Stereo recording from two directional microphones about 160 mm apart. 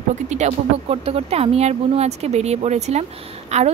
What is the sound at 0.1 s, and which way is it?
Speech, 45° right (ahead or behind).